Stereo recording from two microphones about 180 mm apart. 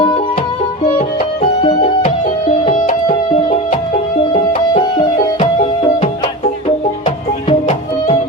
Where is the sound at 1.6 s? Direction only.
30° left (ahead or behind).